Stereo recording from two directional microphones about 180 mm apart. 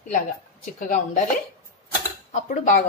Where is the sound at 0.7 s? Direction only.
45° left (ahead or behind).